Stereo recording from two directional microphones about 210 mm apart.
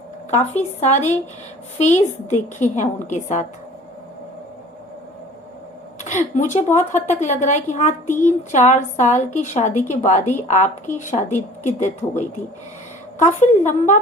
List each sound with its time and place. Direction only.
0.3 s a woman's voice: 30° left (ahead or behind)
6.0 s a woman's voice: 35° left (ahead or behind)